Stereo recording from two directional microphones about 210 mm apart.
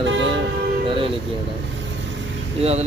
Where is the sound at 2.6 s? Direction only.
30° right (ahead or behind).